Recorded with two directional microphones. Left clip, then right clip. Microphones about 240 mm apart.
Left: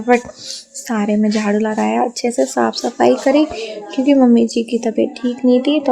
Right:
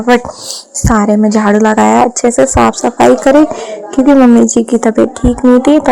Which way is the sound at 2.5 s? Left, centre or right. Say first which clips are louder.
Right 8 dB; centre.